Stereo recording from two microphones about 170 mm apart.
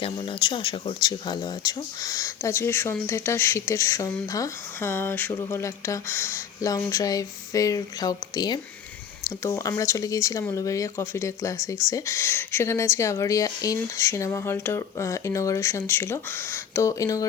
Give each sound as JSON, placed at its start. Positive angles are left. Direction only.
{"t": 0.0, "sound": "speech", "side_deg": 30}